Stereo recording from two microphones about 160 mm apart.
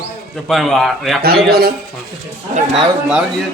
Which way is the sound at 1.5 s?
70° right (ahead or behind).